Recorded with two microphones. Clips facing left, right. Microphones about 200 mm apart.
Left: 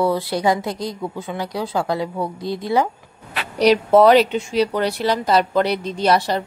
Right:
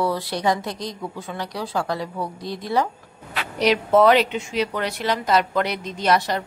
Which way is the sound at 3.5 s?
35° left (ahead or behind).